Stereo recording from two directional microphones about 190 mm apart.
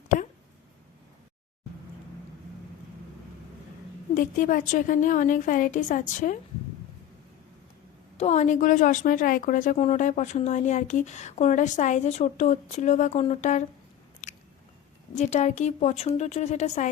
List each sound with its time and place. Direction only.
4.1 s a woman's voice: 45° left (ahead or behind)
8.2 s a woman's voice: 35° left (ahead or behind)
14.2 s biting: 40° left (ahead or behind)
15.1 s a woman's voice: 40° left (ahead or behind)